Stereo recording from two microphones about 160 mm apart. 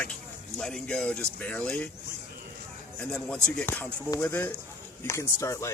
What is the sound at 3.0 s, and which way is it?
Speech, 5° left (ahead or behind).